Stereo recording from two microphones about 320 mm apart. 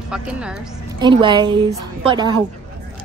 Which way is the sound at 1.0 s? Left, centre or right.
Centre.